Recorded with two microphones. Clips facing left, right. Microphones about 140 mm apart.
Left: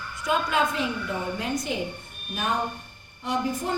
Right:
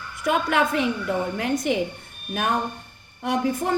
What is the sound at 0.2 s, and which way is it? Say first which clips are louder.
A woman's voice: right 3 dB; 60° right (ahead or behind).